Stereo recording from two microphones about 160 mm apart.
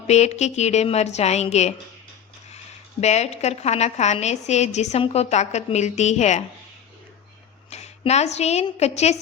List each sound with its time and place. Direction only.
0.1 s a woman's voice: 45° left (ahead or behind)
3.0 s a woman's voice: 45° left (ahead or behind)
7.7 s a woman's voice: 45° left (ahead or behind)